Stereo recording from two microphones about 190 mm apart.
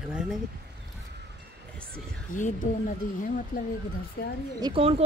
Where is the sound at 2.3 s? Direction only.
45° left (ahead or behind).